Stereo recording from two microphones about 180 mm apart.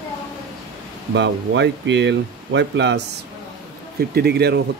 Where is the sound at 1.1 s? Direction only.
80° right.